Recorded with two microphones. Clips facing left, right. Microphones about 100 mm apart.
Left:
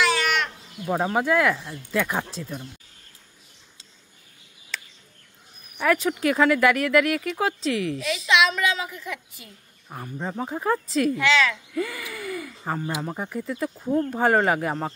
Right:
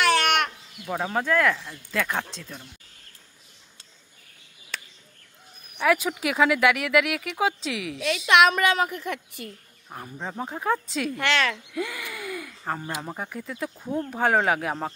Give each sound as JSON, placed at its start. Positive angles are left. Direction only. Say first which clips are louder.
{"t": 0.0, "sound": "a sound", "louder": "right 1 dB", "side_deg": -60}
{"t": 0.8, "sound": "speech", "louder": "left 3 dB", "side_deg": 15}
{"t": 5.9, "sound": "speech", "louder": "left 2 dB", "side_deg": -5}
{"t": 8.3, "sound": "a woman's voice", "louder": "right 3 dB", "side_deg": -55}
{"t": 9.8, "sound": "speech", "louder": "left 3 dB", "side_deg": 0}
{"t": 11.1, "sound": "a woman's voice", "louder": "even", "side_deg": -55}
{"t": 11.7, "sound": "speech", "louder": "left 2 dB", "side_deg": 0}